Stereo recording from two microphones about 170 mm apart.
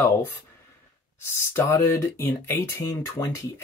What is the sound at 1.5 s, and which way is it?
Speech, 15° left (ahead or behind).